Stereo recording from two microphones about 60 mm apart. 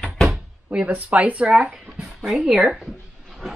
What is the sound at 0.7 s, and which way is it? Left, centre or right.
Speech, right.